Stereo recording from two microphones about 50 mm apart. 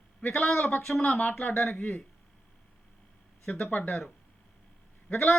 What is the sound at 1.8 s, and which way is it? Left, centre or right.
Speech, left.